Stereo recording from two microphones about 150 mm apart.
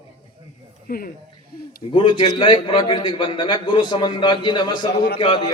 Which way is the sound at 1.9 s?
35° left (ahead or behind).